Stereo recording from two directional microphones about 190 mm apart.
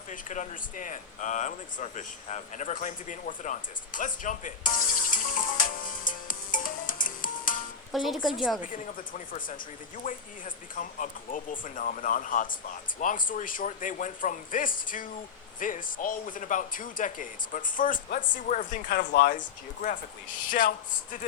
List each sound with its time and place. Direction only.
0.1 s speech: 45° left (ahead or behind)
6.1 s music: 45° left (ahead or behind)
7.9 s a woman's voice: centre (ahead or behind)
8.6 s speech: 45° left (ahead or behind)
20.5 s speech: 45° left (ahead or behind)